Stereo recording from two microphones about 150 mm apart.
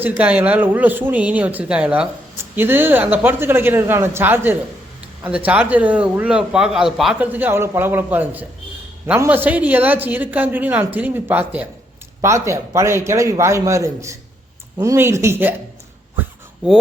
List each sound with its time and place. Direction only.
0.0 s a man's voice: 10° right (ahead or behind)